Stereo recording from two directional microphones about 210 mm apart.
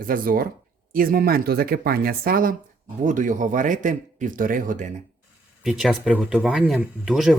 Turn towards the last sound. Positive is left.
turn(degrees=0)  # may be behind; listen again after turning